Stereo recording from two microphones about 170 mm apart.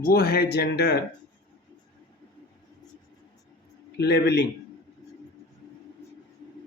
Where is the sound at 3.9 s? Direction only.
75° left (ahead or behind).